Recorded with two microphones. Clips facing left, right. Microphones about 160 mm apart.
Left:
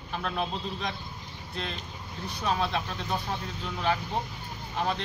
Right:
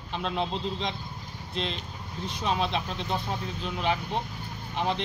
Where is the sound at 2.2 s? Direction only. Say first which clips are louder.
Right 1 dB; 20° right (ahead or behind).